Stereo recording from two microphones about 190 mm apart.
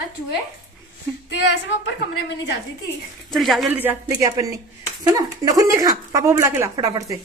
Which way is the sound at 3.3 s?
Centre (ahead or behind).